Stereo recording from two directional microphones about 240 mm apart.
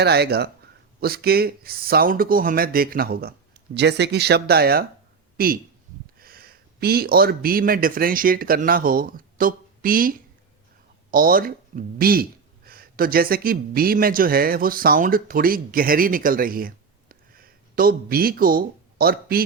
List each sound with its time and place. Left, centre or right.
0.0 s a man's voice: right